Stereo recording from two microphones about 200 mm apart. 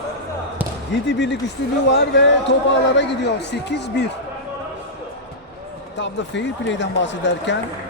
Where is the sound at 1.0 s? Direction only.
60° left (ahead or behind).